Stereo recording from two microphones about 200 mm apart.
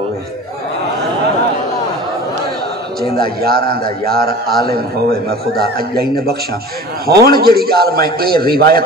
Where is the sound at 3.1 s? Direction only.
50° right (ahead or behind).